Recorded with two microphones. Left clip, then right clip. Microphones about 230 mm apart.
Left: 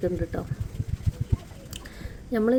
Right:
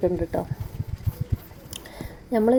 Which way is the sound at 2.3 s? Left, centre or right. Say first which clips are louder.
Right 3 dB; centre.